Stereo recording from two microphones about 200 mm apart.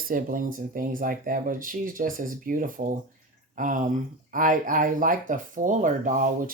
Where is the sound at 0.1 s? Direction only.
45° right (ahead or behind).